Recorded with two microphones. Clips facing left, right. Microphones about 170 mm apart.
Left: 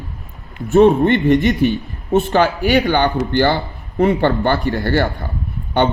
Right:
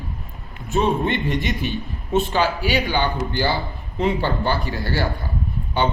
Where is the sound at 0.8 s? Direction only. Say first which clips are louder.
Left 9 dB; 65° left (ahead or behind).